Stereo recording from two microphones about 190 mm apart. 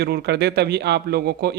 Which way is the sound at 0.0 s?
60° right (ahead or behind).